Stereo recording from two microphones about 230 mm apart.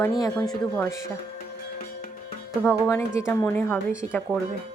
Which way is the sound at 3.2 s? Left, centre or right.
Centre.